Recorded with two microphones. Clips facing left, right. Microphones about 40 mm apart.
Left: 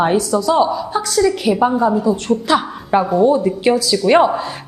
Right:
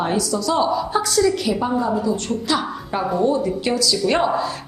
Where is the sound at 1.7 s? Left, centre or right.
Centre.